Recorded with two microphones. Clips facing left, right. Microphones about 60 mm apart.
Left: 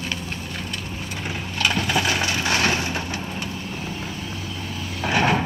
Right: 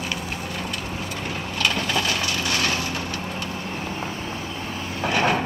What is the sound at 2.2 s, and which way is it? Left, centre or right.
Vehicle, left.